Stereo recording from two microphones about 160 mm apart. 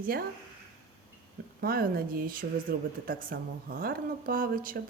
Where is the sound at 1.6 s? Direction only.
70° right (ahead or behind).